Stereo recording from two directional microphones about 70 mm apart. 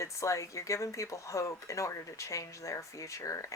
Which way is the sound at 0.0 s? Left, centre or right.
Left.